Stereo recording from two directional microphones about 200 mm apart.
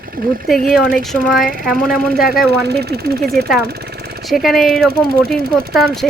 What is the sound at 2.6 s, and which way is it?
Speech, 55° right (ahead or behind).